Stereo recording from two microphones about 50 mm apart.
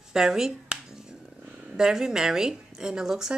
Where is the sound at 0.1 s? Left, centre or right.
Centre.